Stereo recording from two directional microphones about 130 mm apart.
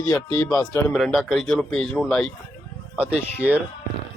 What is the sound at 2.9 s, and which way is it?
Speech, 10° right (ahead or behind).